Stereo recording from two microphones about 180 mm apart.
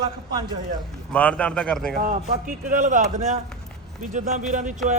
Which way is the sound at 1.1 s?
5° left (ahead or behind).